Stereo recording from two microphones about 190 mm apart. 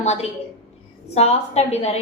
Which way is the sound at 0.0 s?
35° left (ahead or behind).